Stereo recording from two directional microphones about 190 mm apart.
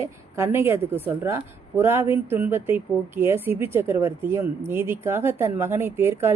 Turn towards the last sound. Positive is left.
turn(degrees=-10)  # may be behind; listen again after turning